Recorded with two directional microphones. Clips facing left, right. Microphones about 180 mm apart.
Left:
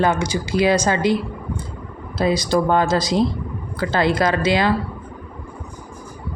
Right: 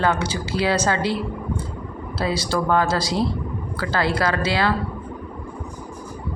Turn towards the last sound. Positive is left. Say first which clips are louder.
# left 3 dB
turn(degrees=20)  # may be behind; listen again after turning